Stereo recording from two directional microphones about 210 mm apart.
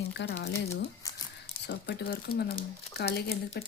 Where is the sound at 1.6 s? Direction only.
50° left (ahead or behind).